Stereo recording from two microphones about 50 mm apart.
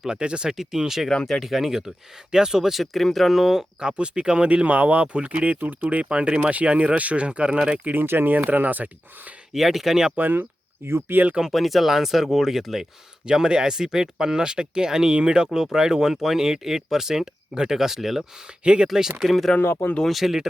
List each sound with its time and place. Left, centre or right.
0.0 s speech: centre
1.1 s speech: centre
3.8 s speech: centre
7.9 s speech: right
9.5 s speech: centre
10.2 s speech: right
10.8 s speech: right
11.5 s speech: centre
18.6 s speech: right
19.2 s speech: centre